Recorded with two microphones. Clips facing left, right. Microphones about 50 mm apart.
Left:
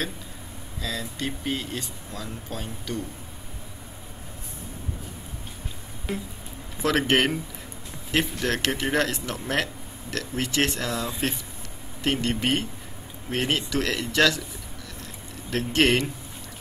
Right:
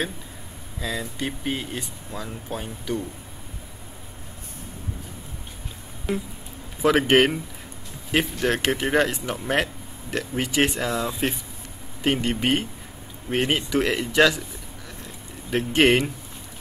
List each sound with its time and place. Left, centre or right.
0.7 s speech: centre
6.8 s speech: centre
15.5 s speech: centre